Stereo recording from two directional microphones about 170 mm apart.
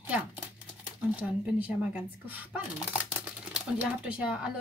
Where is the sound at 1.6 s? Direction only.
10° right (ahead or behind).